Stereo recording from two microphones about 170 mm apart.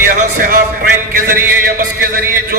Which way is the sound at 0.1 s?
55° right (ahead or behind).